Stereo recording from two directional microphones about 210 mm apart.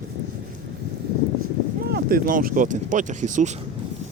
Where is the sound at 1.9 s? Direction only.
45° right (ahead or behind).